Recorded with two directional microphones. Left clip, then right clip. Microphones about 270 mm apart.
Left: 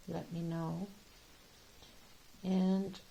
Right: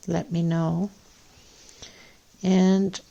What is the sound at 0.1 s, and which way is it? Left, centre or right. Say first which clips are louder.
Speech: right 15 dB; right.